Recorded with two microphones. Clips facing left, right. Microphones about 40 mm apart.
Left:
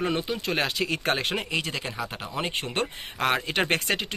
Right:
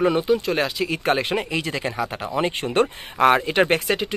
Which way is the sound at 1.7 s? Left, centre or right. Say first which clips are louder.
Right 6 dB; right.